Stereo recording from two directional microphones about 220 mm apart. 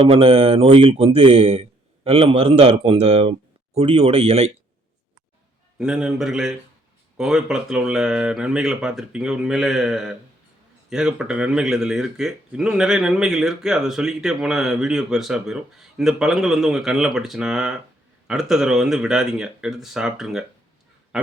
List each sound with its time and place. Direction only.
0.1 s speech: 25° right (ahead or behind)
5.8 s a man's voice: 5° right (ahead or behind)